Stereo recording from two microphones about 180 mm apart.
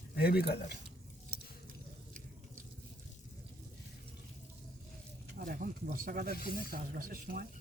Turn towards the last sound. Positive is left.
turn(degrees=-55)  # may be behind; listen again after turning